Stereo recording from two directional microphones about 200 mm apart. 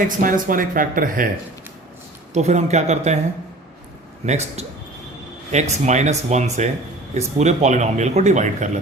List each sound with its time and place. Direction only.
0.2 s speech: 45° right (ahead or behind)
2.3 s speech: 35° right (ahead or behind)
4.3 s speech: 35° right (ahead or behind)